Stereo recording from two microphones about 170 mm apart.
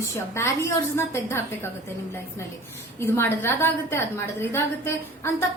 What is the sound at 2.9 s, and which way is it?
A woman's voice, 15° left (ahead or behind).